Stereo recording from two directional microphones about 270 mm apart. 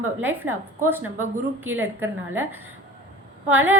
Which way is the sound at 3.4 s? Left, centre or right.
Centre.